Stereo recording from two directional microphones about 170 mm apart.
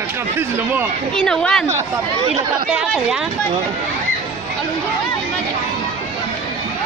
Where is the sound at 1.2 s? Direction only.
5° left (ahead or behind).